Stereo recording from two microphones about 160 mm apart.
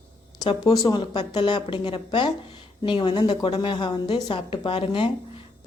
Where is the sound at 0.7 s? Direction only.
25° left (ahead or behind).